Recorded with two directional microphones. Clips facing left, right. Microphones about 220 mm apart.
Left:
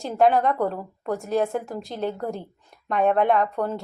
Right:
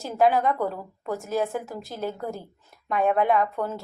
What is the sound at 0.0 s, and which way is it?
A woman's voice, centre (ahead or behind).